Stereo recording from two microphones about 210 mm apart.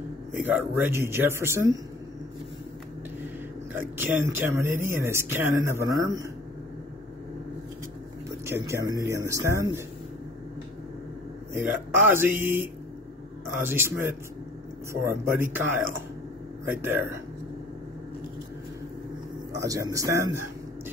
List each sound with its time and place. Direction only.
0.4 s speech: 10° right (ahead or behind)
3.7 s speech: 10° right (ahead or behind)
8.5 s speech: 15° right (ahead or behind)
11.5 s speech: 10° right (ahead or behind)
19.5 s speech: 15° right (ahead or behind)